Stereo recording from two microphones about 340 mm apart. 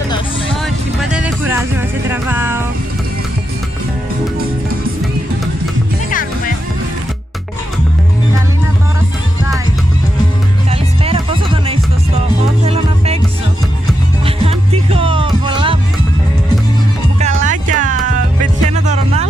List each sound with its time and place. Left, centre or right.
1.1 s music: centre
10.7 s music: centre
14.2 s music: centre
17.2 s music: right